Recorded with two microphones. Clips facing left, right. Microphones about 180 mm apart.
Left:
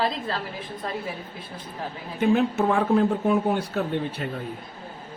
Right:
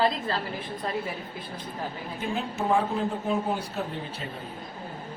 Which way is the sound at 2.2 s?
65° left (ahead or behind).